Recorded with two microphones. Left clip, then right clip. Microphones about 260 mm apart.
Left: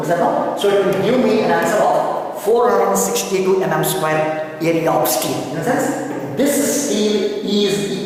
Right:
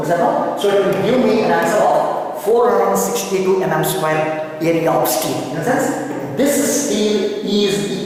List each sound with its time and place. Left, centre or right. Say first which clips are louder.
0.1 s speech: right 1 dB; centre